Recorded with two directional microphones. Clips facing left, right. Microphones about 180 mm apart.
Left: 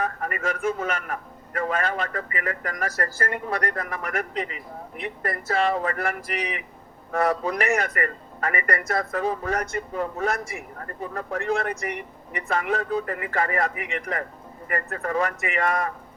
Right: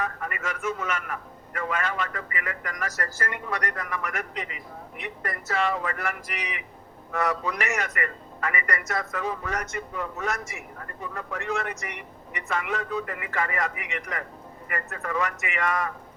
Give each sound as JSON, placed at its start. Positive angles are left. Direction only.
{"t": 0.0, "sound": "a man's voice", "side_deg": 40}